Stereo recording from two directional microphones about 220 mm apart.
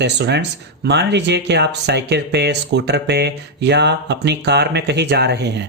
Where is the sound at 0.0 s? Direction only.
50° right (ahead or behind).